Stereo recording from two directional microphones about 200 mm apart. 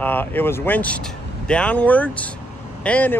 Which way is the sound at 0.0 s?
10° left (ahead or behind).